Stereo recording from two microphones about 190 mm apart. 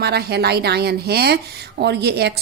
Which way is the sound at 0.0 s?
55° right (ahead or behind).